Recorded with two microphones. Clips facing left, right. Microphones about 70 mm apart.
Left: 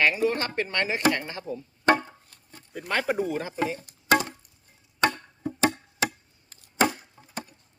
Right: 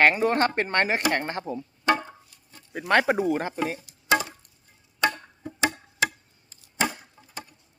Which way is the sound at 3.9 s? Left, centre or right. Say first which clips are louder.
Even; left.